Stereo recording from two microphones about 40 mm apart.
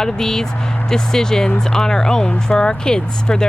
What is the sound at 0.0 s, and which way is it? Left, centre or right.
Speech, centre.